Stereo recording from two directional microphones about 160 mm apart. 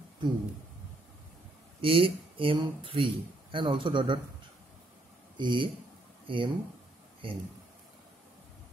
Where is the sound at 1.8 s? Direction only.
35° right (ahead or behind).